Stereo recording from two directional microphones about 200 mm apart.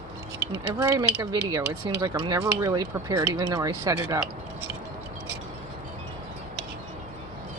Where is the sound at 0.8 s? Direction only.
15° right (ahead or behind).